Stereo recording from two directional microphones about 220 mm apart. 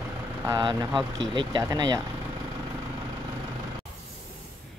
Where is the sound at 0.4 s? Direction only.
15° right (ahead or behind).